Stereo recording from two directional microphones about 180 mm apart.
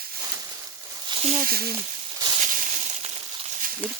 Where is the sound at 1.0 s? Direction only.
35° right (ahead or behind).